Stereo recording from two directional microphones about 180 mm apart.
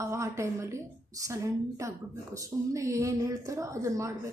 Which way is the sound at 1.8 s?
15° right (ahead or behind).